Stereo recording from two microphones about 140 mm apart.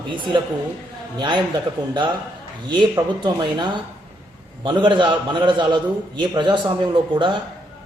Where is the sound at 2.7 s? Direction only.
30° right (ahead or behind).